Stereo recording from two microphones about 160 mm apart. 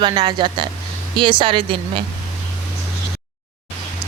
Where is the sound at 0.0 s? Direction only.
25° right (ahead or behind).